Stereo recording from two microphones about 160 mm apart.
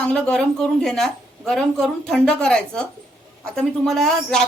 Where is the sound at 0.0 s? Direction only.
5° left (ahead or behind).